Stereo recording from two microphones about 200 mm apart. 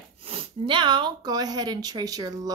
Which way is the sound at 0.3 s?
25° right (ahead or behind).